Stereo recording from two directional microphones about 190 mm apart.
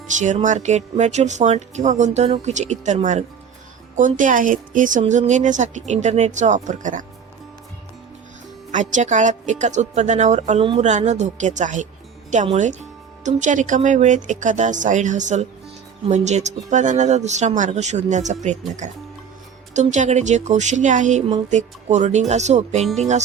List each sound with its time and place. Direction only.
0.2 s speech: 40° right (ahead or behind)
8.7 s speech: 40° right (ahead or behind)
19.7 s speech: 40° right (ahead or behind)